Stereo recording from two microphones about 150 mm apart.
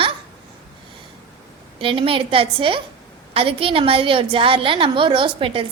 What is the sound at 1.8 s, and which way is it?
A woman's voice, 35° right (ahead or behind).